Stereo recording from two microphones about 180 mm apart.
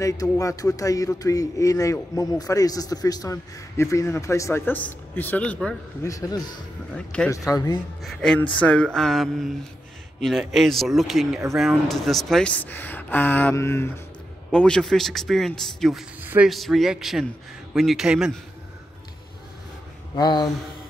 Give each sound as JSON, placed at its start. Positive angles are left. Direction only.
{"t": 0.0, "sound": "speech", "side_deg": 20}
{"t": 6.0, "sound": "speech", "side_deg": 20}
{"t": 8.0, "sound": "speech", "side_deg": 0}
{"t": 20.2, "sound": "speech", "side_deg": 25}